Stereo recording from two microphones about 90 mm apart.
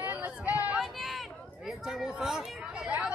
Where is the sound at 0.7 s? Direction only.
5° right (ahead or behind).